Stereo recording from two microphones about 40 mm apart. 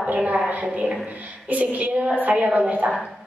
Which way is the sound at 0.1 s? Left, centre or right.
Right.